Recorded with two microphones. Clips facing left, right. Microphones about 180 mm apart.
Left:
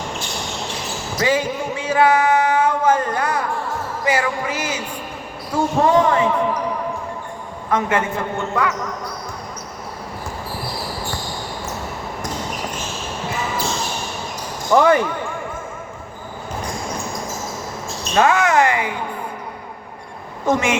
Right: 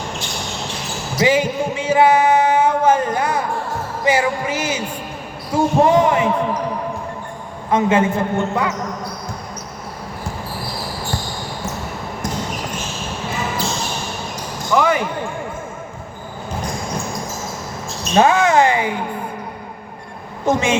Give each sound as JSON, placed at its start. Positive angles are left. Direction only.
{"t": 1.2, "sound": "music", "side_deg": -20}
{"t": 4.0, "sound": "a man's voice", "side_deg": -25}
{"t": 5.8, "sound": "a man's voice", "side_deg": -20}
{"t": 7.7, "sound": "a man's voice", "side_deg": -25}
{"t": 14.7, "sound": "speech", "side_deg": 25}
{"t": 18.1, "sound": "a man's voice", "side_deg": -25}
{"t": 20.4, "sound": "a man's voice", "side_deg": -25}